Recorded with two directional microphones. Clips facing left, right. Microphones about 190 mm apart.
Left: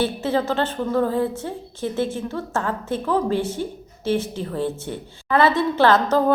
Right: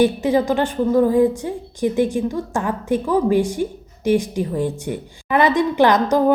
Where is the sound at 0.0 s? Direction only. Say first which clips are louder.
Right 5 dB; 15° right (ahead or behind).